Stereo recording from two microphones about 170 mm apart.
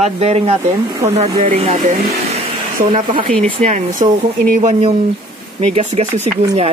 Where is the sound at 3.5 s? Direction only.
45° right (ahead or behind).